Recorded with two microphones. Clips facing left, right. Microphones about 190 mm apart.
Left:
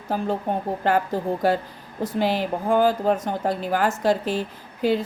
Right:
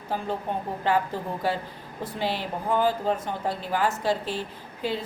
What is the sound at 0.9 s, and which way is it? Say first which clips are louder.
A woman's voice: left 4 dB; 45° left (ahead or behind).